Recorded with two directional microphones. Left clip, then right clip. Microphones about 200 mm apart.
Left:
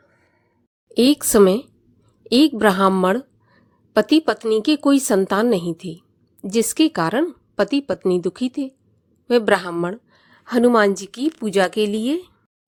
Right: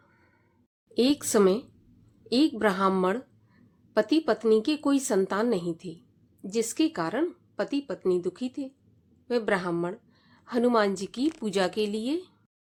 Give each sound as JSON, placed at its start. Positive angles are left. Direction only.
{"t": 0.9, "sound": "a woman's voice", "side_deg": 35}